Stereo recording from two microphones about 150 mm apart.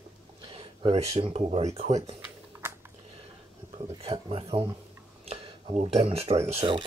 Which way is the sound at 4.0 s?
40° right (ahead or behind).